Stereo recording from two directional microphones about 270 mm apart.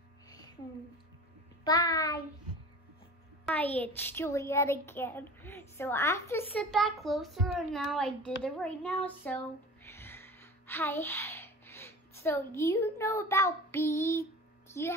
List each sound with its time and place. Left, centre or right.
1.6 s a child's voice: centre
3.4 s a child's voice: centre
9.8 s a sound: centre
14.7 s a child's voice: centre